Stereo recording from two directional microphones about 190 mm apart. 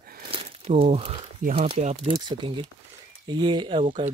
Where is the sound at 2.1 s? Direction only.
25° right (ahead or behind).